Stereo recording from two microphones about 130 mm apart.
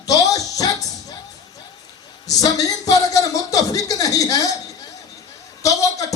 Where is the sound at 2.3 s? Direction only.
25° left (ahead or behind).